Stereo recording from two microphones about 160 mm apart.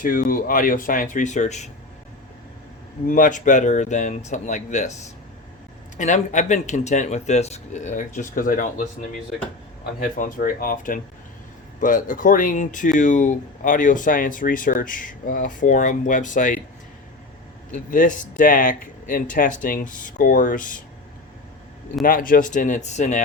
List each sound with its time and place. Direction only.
0.0 s speech: 60° left (ahead or behind)
3.1 s speech: 55° left (ahead or behind)
6.0 s speech: 50° left (ahead or behind)
10.0 s speech: 55° left (ahead or behind)
17.9 s speech: 55° left (ahead or behind)
22.0 s speech: 60° left (ahead or behind)